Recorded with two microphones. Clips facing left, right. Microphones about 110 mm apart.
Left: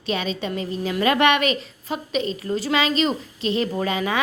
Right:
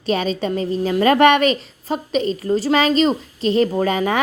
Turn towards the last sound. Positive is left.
turn(degrees=-40)  # may be behind; listen again after turning